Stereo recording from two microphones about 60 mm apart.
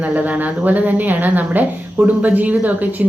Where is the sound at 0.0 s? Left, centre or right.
Right.